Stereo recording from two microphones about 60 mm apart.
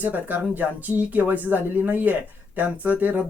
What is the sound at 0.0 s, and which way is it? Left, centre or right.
Speech, right.